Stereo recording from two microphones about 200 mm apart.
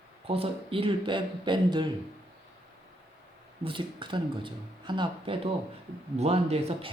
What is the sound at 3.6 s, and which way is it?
Speech, 25° right (ahead or behind).